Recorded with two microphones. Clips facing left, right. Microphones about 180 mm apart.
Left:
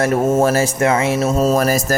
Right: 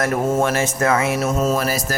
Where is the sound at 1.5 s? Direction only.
45° left (ahead or behind).